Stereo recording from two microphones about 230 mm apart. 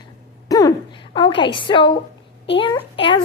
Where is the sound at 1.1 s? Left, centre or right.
Left.